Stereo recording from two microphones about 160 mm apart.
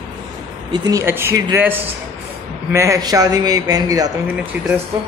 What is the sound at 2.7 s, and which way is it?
A man's voice, 20° right (ahead or behind).